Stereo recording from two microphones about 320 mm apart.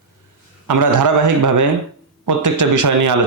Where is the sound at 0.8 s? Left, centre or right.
Right.